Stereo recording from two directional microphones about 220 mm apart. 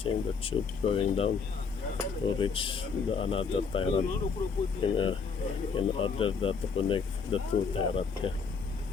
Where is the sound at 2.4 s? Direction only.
25° left (ahead or behind).